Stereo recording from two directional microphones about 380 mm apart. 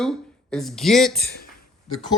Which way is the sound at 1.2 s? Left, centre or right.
Left.